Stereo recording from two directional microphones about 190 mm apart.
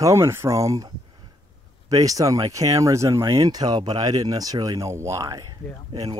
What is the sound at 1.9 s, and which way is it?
Speech, 20° right (ahead or behind).